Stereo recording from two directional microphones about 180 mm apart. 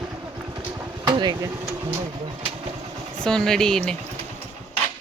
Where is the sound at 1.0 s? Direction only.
25° right (ahead or behind).